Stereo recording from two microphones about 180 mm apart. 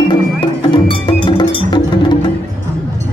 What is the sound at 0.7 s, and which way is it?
Music, 30° left (ahead or behind).